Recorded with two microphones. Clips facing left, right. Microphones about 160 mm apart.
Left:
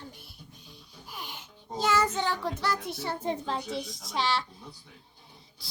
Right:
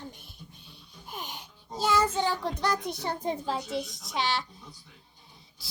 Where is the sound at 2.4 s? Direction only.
20° right (ahead or behind).